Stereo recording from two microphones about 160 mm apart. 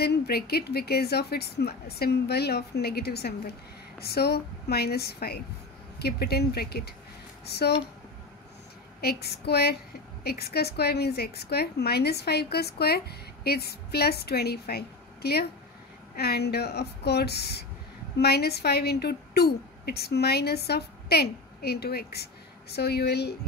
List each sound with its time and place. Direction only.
0.0 s a woman's voice: 85° left
9.0 s a woman's voice: 85° left